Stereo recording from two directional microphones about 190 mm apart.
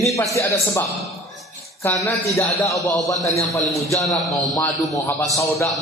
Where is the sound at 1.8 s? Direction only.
15° left (ahead or behind).